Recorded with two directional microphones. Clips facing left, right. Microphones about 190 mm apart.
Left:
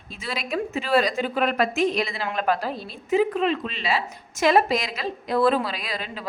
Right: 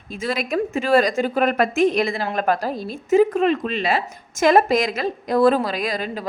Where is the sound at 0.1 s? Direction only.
50° right (ahead or behind).